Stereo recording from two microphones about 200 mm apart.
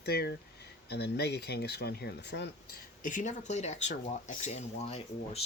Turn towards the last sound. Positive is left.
turn(degrees=30)  # may be behind; listen again after turning